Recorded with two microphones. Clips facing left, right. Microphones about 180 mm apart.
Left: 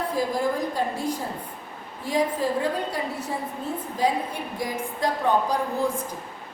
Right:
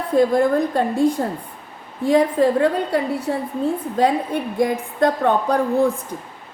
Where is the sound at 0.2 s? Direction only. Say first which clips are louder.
Right 11 dB; 60° right (ahead or behind).